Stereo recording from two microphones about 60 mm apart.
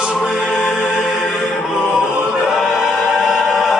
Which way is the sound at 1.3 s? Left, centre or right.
Centre.